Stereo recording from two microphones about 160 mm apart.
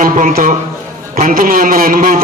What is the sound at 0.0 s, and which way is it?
Speech, 60° right (ahead or behind).